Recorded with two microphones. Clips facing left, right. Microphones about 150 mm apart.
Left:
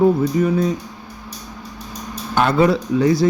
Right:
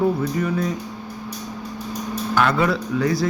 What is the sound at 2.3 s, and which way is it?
Speech, 25° left (ahead or behind).